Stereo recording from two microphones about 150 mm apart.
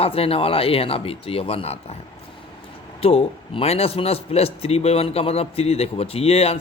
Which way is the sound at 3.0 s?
40° left (ahead or behind).